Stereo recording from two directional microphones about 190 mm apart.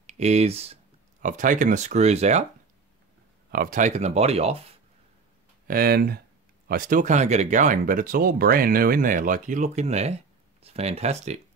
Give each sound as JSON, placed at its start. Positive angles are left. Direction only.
{"t": 0.0, "sound": "speech", "side_deg": -35}
{"t": 1.2, "sound": "speech", "side_deg": -45}
{"t": 3.5, "sound": "speech", "side_deg": -45}
{"t": 5.7, "sound": "speech", "side_deg": -50}